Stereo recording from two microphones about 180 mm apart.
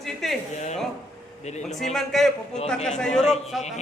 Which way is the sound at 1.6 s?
Centre (ahead or behind).